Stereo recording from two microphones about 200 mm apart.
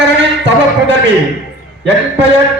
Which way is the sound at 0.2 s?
60° right (ahead or behind).